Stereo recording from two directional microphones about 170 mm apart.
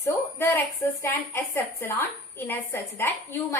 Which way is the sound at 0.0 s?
15° left (ahead or behind).